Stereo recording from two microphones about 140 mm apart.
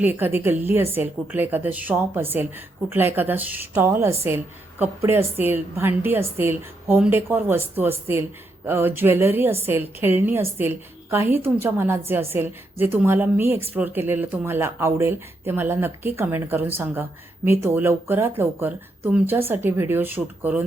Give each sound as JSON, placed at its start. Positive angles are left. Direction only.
{"t": 0.0, "sound": "a woman's voice", "side_deg": -15}